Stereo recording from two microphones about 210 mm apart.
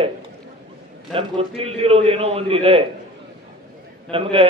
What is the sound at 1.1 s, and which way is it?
A man's voice, 30° right (ahead or behind).